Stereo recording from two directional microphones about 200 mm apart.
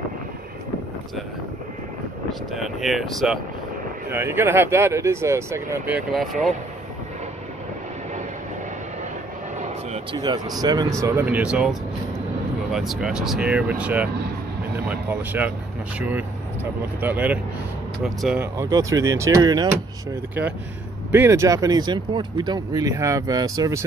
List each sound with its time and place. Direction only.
2.5 s speech: centre (ahead or behind)
4.1 s speech: 10° right (ahead or behind)
5.9 s speech: centre (ahead or behind)
10.1 s speech: 20° right (ahead or behind)
12.7 s speech: centre (ahead or behind); by 19.7 s 20° right (ahead or behind)
21.1 s speech: 15° right (ahead or behind)